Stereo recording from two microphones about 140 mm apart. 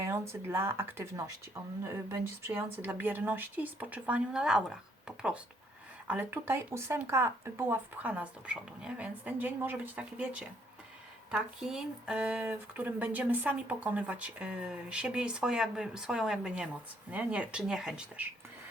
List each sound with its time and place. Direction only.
0.0 s speech: 20° right (ahead or behind)